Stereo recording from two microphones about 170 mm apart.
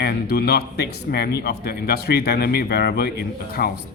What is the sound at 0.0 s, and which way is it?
Speech, 65° left (ahead or behind).